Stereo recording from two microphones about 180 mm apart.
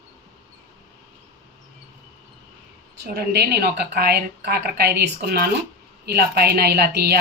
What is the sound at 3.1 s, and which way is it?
Speech, 60° right (ahead or behind).